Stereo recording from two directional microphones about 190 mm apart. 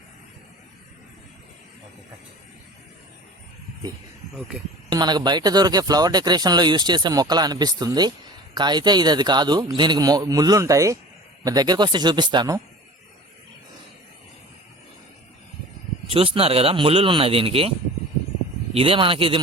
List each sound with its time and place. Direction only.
4.9 s speech: 20° right (ahead or behind)
16.0 s speech: 30° right (ahead or behind)